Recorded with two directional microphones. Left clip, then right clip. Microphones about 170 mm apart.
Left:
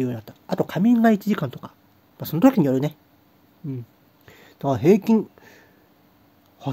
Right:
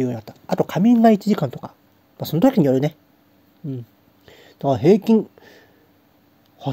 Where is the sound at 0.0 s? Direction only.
15° right (ahead or behind).